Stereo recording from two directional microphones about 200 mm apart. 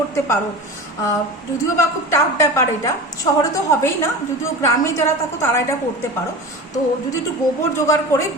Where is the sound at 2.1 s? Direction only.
15° left (ahead or behind).